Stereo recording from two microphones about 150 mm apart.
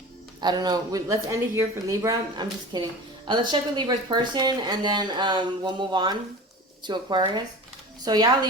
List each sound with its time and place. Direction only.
0.4 s speech: 25° right (ahead or behind)